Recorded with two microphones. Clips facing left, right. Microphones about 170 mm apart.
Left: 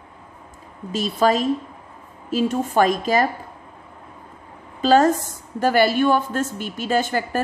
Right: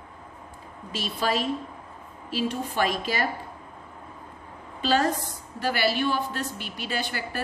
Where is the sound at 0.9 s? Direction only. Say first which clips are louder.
Left 9 dB; 40° left (ahead or behind).